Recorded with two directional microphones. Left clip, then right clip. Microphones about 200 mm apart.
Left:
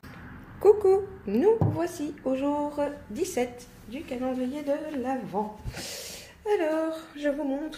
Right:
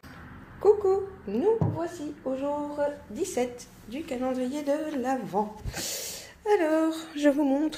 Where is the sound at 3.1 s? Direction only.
5° left (ahead or behind).